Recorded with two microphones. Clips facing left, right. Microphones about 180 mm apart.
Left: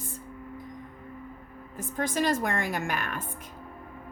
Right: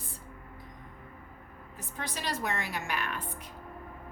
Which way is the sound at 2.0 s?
50° left (ahead or behind).